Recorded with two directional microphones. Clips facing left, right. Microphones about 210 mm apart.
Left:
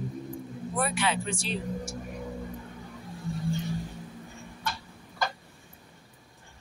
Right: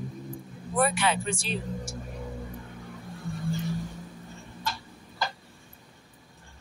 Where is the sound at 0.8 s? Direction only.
50° right (ahead or behind).